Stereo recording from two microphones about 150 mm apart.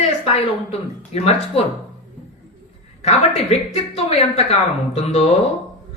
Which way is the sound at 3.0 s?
45° left (ahead or behind).